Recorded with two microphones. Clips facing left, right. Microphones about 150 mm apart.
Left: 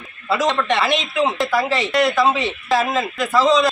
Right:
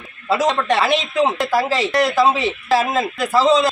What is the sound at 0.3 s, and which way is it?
A man's voice, 35° right (ahead or behind).